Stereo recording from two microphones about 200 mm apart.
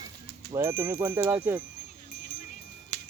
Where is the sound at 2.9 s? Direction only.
35° left (ahead or behind).